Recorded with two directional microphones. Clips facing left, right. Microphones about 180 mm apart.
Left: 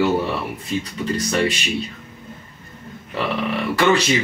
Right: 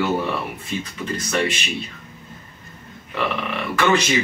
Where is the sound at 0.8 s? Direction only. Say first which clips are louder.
Left 4 dB; 35° left (ahead or behind).